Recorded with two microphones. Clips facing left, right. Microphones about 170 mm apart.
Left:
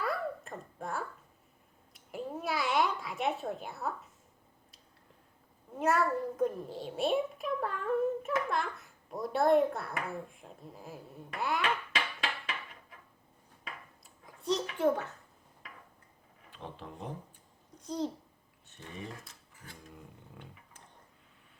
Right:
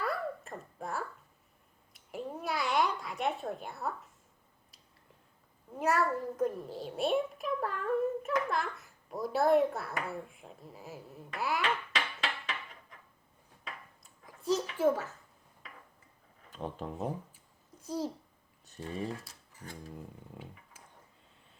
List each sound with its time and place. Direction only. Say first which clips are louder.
0.0 s a sound: even; centre (ahead or behind)
1.9 s a child's voice: left 1 dB; centre (ahead or behind)
5.7 s a child's voice: left 1 dB; centre (ahead or behind)
14.3 s a child's voice: right 1 dB; centre (ahead or behind)
16.5 s speech: right 6 dB; 45° right (ahead or behind)
17.7 s a child's voice: left 1 dB; 5° right (ahead or behind)
18.7 s speech: right 7 dB; 35° right (ahead or behind)